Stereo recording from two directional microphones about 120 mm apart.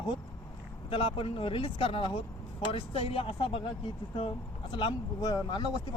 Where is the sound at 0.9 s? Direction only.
50° left (ahead or behind).